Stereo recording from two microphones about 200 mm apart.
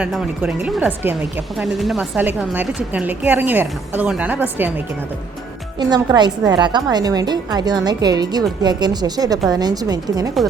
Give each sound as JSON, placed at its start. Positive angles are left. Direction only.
{"t": 0.0, "sound": "a woman's voice", "side_deg": -5}
{"t": 5.8, "sound": "a woman's voice", "side_deg": -20}